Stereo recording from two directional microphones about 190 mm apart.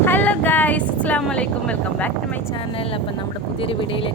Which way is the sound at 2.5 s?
30° left (ahead or behind).